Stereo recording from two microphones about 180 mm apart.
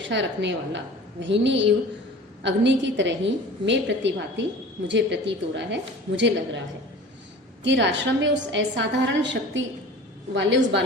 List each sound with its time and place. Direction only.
0.0 s a woman's voice: 85° right
7.6 s a woman's voice: 90° right